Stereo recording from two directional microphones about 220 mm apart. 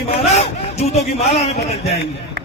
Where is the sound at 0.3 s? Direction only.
30° left (ahead or behind).